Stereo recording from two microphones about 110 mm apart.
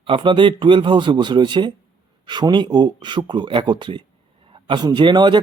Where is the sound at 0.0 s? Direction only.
50° right (ahead or behind).